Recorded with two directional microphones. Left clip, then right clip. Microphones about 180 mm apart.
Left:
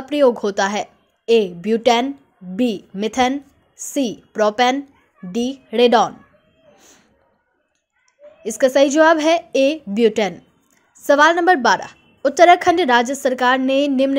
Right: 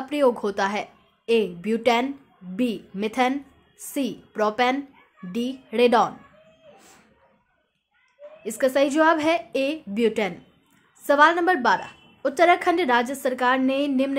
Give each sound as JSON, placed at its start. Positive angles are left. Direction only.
{"t": 0.0, "sound": "a woman's voice", "side_deg": 25}
{"t": 8.4, "sound": "a woman's voice", "side_deg": 30}